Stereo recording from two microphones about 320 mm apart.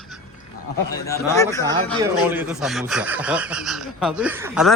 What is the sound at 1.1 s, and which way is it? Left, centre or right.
Speech, centre.